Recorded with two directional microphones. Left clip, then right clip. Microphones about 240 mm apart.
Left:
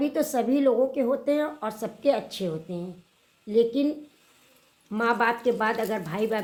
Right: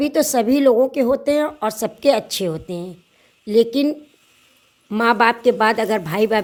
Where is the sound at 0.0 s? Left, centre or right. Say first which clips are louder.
Right 8 dB; right.